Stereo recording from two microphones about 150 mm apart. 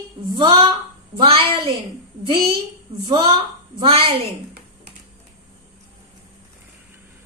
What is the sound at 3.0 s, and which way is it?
A woman's voice, 35° right (ahead or behind).